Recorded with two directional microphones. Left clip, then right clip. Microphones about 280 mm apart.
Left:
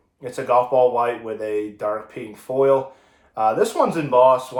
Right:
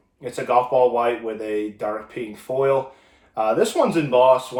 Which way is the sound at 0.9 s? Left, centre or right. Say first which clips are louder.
Even; centre.